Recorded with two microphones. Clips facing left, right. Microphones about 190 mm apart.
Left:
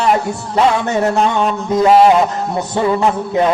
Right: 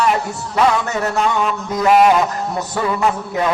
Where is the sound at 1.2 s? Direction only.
30° left (ahead or behind).